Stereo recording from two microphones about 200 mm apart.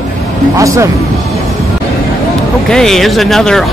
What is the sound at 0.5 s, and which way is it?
Speech, 15° right (ahead or behind).